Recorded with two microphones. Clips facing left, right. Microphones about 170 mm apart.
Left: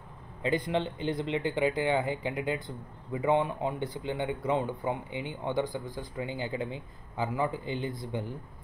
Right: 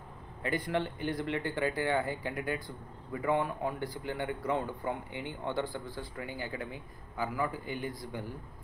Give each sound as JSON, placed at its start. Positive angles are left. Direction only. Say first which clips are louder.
{"t": 0.4, "sound": "speech", "louder": "left 3 dB", "side_deg": 20}